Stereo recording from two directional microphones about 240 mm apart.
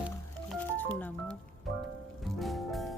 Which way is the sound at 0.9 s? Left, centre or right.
Centre.